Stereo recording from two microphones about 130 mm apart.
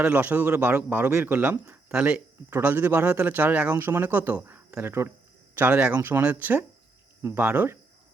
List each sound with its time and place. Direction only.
0.0 s speech: 10° right (ahead or behind)